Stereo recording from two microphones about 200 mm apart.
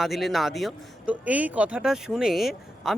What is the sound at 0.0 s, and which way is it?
Speech, centre (ahead or behind).